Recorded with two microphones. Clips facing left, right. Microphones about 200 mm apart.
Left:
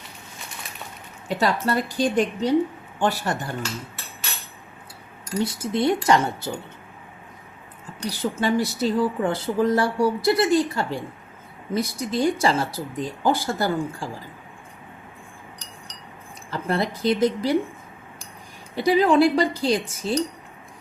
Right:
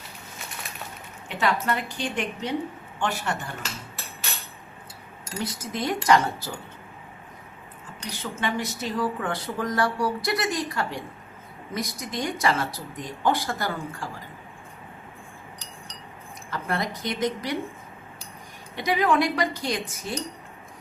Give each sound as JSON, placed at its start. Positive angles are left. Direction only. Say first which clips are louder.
{"t": 1.3, "sound": "a woman's voice", "louder": "left 3 dB", "side_deg": 35}
{"t": 5.4, "sound": "speech", "louder": "left 7 dB", "side_deg": 30}
{"t": 8.0, "sound": "speech", "louder": "left 6 dB", "side_deg": 35}
{"t": 16.5, "sound": "a woman's voice", "louder": "left 4 dB", "side_deg": 30}
{"t": 18.8, "sound": "a woman's voice", "louder": "left 6 dB", "side_deg": 30}